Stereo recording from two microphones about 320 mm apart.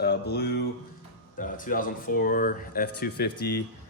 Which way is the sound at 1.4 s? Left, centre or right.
Left.